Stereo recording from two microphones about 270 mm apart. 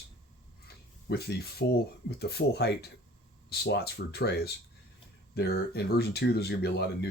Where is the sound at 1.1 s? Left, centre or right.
Left.